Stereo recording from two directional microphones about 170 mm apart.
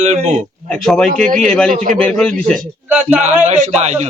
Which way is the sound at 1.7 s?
50° right (ahead or behind).